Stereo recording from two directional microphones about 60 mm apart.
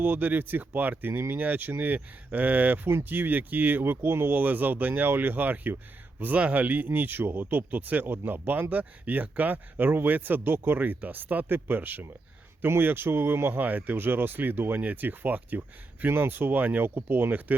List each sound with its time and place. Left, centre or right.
0.0 s speech: right